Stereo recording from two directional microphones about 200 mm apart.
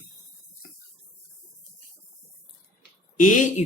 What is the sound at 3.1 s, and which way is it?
Speech, 40° left (ahead or behind).